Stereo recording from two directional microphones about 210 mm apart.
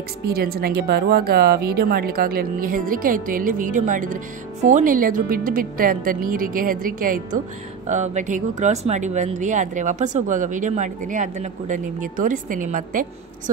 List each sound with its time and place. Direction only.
0.3 s speech: 45° right (ahead or behind)